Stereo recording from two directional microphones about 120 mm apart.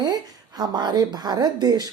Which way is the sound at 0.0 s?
35° right (ahead or behind).